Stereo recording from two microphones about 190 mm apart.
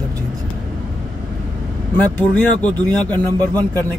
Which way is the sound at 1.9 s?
5° left (ahead or behind).